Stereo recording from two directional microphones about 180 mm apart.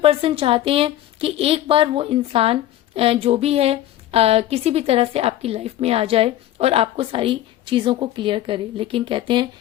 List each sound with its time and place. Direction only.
0.0 s speech: 30° right (ahead or behind)